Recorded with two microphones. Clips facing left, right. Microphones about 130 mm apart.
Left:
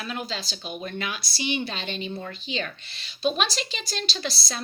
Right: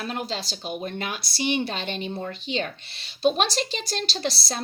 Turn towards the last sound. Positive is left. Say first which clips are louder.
# right 3 dB
turn(degrees=-65)  # may be behind; listen again after turning